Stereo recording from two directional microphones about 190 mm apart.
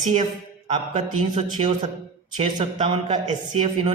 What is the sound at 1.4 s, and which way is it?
Speech, 30° right (ahead or behind).